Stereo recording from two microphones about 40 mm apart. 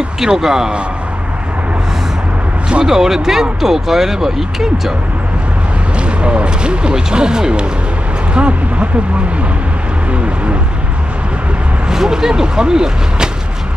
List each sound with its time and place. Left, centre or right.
0.2 s speech: centre
2.8 s speech: centre
5.9 s speech: right
8.4 s speech: right
11.9 s speech: centre